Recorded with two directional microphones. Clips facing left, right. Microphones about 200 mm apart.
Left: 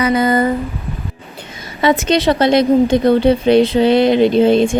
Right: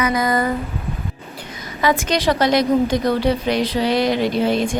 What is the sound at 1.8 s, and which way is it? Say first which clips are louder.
A woman's voice: left 5 dB; 25° left (ahead or behind).